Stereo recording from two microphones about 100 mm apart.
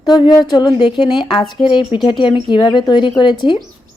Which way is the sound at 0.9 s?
55° left (ahead or behind).